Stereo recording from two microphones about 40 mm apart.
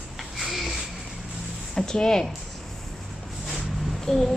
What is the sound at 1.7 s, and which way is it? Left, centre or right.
Speech, centre.